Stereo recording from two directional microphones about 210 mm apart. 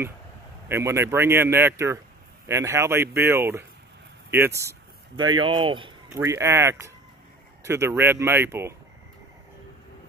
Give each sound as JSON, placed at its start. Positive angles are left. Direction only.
{"t": 0.7, "sound": "speech", "side_deg": -10}
{"t": 6.0, "sound": "speech", "side_deg": -10}